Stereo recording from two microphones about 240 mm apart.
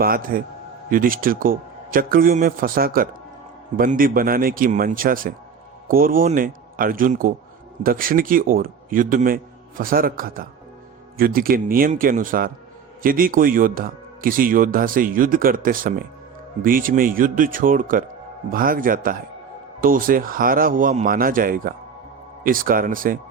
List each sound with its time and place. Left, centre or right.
0.0 s speech: right